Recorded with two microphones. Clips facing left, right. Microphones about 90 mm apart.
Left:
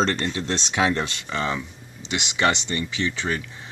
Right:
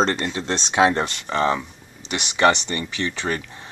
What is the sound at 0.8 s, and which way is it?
Speech, 35° right (ahead or behind).